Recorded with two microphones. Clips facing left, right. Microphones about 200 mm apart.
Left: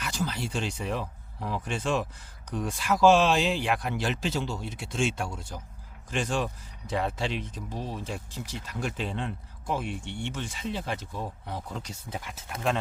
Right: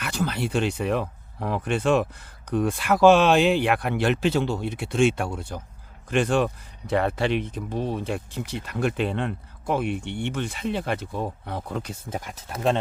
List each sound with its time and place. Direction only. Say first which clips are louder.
0.0 s speech: right 5 dB; 60° right (ahead or behind)
12.4 s speech: right 5 dB; 35° right (ahead or behind)